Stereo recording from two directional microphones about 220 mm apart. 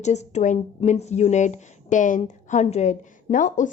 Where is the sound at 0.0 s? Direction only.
30° left (ahead or behind).